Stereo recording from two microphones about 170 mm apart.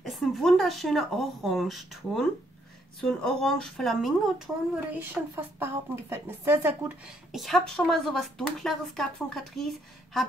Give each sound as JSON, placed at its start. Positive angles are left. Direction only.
{"t": 0.0, "sound": "a woman's voice", "side_deg": 0}
{"t": 4.9, "sound": "a woman's voice", "side_deg": -15}
{"t": 7.3, "sound": "speech", "side_deg": 0}